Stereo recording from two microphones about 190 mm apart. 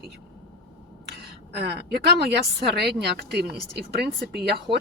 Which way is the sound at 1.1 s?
60° right (ahead or behind).